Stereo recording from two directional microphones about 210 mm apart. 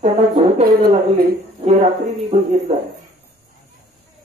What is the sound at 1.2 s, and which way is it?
Speech, 45° right (ahead or behind).